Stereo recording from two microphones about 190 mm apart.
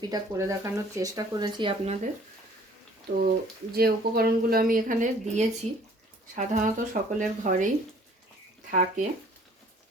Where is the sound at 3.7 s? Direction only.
55° right (ahead or behind).